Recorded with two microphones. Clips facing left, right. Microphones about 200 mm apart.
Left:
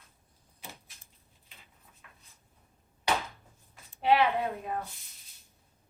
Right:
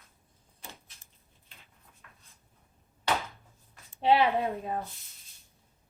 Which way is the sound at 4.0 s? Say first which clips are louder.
Right 1 dB; 30° right (ahead or behind).